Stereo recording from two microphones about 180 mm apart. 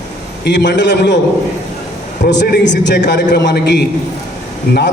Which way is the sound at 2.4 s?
75° left (ahead or behind).